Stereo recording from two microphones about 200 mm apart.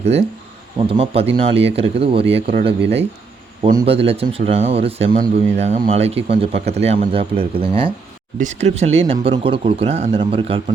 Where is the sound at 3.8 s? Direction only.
30° right (ahead or behind).